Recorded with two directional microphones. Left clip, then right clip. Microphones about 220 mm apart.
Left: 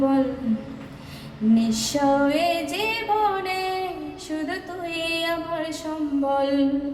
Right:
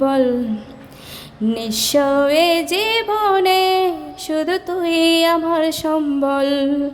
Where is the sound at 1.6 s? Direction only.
45° right (ahead or behind).